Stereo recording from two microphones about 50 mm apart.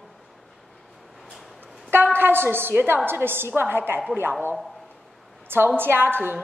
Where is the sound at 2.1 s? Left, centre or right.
Right.